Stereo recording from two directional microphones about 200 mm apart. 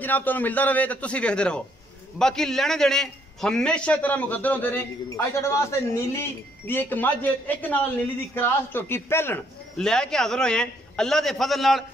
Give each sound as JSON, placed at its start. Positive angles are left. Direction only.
{"t": 0.0, "sound": "a man's voice", "side_deg": 10}